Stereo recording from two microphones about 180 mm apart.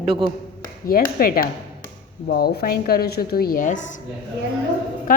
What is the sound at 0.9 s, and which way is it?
A woman's voice, 55° left (ahead or behind).